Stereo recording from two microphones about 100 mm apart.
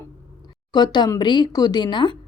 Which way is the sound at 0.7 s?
45° left (ahead or behind).